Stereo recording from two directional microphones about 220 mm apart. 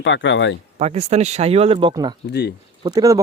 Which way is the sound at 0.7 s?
30° right (ahead or behind).